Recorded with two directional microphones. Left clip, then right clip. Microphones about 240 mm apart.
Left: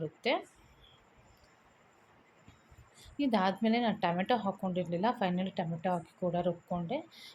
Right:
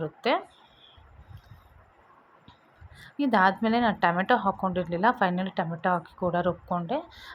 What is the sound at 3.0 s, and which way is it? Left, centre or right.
Speech, centre.